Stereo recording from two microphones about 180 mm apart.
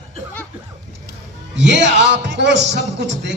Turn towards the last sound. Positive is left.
turn(degrees=-80)